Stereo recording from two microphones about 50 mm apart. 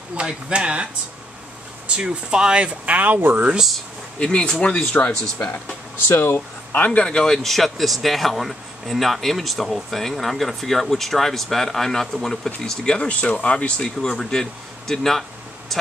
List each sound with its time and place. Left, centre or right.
0.1 s speech: right
1.9 s speech: centre; by 3.4 s right
4.2 s speech: centre
6.1 s speech: left
6.7 s speech: left
7.1 s speech: centre
12.6 s speech: centre